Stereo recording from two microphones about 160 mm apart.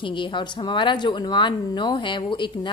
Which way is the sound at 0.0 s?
30° left (ahead or behind).